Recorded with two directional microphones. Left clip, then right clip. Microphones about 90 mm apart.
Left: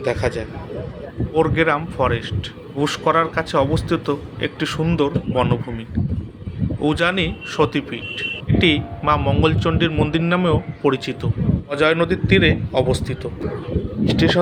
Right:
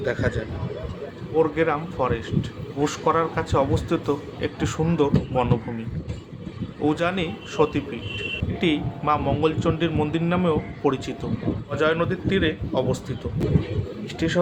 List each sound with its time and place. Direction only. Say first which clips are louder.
0.0 s a man's voice: left 4 dB; 30° left (ahead or behind)
6.8 s a man's voice: left 4 dB; 35° left (ahead or behind)
11.7 s speech: left 5 dB; 35° left (ahead or behind)